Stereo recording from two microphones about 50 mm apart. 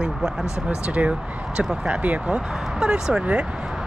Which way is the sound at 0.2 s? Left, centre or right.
Centre.